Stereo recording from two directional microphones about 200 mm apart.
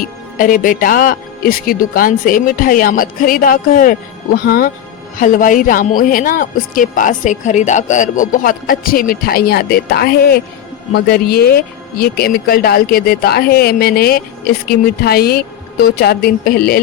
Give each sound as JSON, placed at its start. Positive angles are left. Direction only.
{"t": 0.3, "sound": "speech", "side_deg": 40}